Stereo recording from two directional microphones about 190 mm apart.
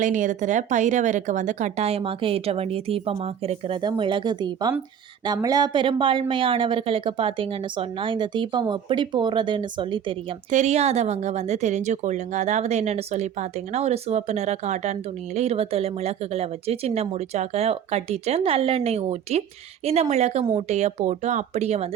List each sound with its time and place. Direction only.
0.0 s speech: 40° right (ahead or behind)
20.4 s speech: 20° right (ahead or behind)
20.7 s speech: 35° right (ahead or behind)